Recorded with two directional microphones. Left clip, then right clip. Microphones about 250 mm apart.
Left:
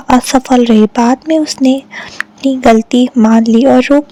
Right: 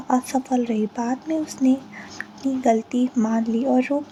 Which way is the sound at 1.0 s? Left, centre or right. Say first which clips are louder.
Left 15 dB; left.